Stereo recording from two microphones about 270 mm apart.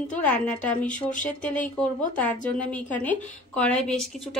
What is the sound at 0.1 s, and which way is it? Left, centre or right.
A woman's voice, centre.